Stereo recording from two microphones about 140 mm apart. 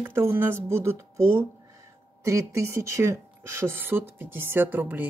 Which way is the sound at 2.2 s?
20° right (ahead or behind).